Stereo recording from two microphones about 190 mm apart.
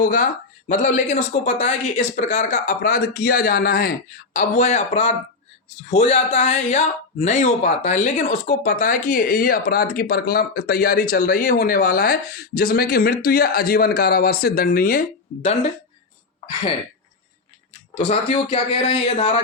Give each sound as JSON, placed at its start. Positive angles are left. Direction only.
{"t": 0.0, "sound": "speech", "side_deg": 45}
{"t": 4.4, "sound": "speech", "side_deg": 40}
{"t": 17.9, "sound": "speech", "side_deg": 30}